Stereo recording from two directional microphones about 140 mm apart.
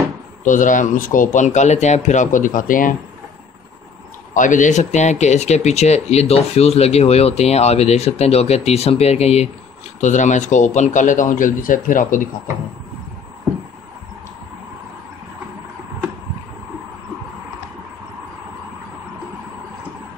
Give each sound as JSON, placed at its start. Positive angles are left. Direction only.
{"t": 0.4, "sound": "speech", "side_deg": 70}
{"t": 4.3, "sound": "speech", "side_deg": 65}